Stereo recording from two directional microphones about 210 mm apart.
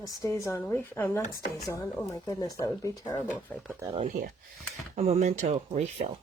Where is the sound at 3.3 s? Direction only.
5° left (ahead or behind).